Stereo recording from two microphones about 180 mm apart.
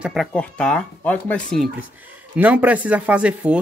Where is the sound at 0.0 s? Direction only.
Centre (ahead or behind).